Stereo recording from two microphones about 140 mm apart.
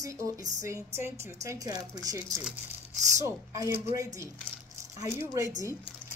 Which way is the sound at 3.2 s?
20° right (ahead or behind).